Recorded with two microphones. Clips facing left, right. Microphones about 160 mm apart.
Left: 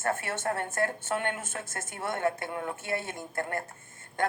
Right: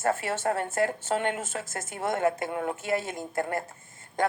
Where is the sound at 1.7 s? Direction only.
40° right (ahead or behind).